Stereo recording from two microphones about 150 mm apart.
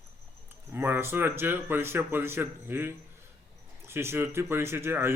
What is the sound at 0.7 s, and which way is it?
A man's voice, 15° right (ahead or behind).